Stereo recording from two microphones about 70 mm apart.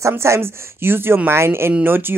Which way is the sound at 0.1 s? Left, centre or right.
Right.